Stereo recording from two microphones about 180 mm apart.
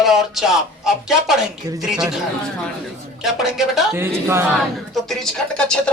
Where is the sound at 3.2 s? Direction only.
Centre (ahead or behind).